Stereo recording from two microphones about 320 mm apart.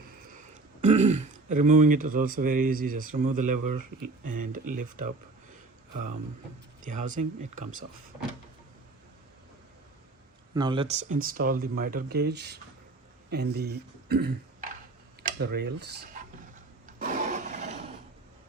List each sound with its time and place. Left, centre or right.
0.3 s speech: right
6.8 s speech: right
10.5 s speech: centre; by 16.0 s right
16.8 s a sound: right